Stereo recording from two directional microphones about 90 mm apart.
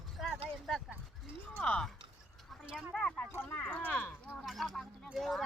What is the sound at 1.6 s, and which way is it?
Speech, 5° left (ahead or behind).